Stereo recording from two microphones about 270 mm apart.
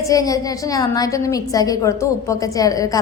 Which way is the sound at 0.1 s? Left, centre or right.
Centre.